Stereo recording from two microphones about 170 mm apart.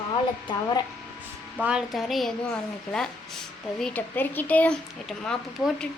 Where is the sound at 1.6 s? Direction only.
5° right (ahead or behind).